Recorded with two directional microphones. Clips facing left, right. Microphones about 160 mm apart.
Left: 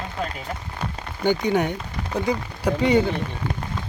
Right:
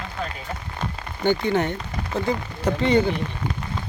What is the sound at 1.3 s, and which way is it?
Speech, 15° left (ahead or behind).